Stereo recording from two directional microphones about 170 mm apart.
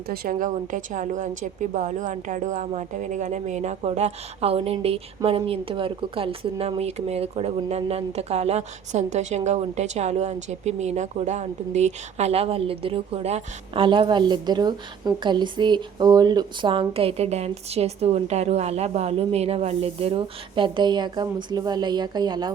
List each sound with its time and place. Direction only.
0.1 s a woman's voice: 50° right (ahead or behind); by 22.5 s 25° right (ahead or behind)